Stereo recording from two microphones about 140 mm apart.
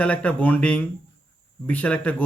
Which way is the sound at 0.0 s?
10° left (ahead or behind).